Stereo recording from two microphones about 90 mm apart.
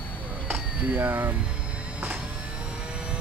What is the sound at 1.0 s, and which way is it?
Speech, 20° right (ahead or behind).